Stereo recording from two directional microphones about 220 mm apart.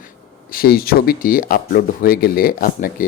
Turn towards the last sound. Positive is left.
turn(degrees=40)  # may be behind; listen again after turning